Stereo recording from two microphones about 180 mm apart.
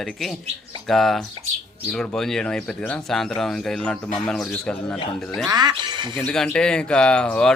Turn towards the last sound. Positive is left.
turn(degrees=5)  # may be behind; listen again after turning